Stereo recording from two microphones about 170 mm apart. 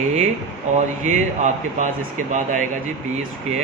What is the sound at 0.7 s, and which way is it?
Speech, 45° right (ahead or behind).